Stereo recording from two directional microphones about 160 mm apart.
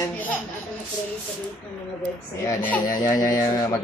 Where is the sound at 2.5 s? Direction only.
10° left (ahead or behind).